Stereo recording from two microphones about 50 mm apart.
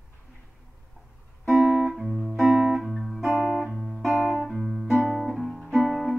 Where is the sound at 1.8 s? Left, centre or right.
Centre.